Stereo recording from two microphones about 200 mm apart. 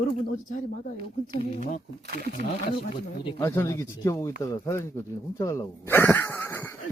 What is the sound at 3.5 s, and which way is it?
Speech, 15° left (ahead or behind).